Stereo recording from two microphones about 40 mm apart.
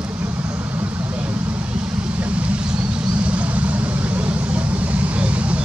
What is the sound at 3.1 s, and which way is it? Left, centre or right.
Vehicle, right.